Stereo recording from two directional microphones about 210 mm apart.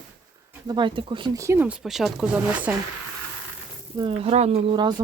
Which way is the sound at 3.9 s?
25° right (ahead or behind).